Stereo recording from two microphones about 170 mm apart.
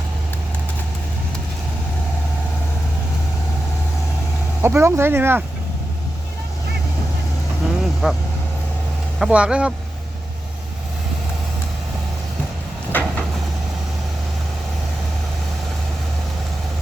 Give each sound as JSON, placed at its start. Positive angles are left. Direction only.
{"t": 4.6, "sound": "speech", "side_deg": -15}
{"t": 7.6, "sound": "vehicle", "side_deg": -5}
{"t": 9.1, "sound": "speech", "side_deg": -5}
{"t": 12.9, "sound": "a sound", "side_deg": 10}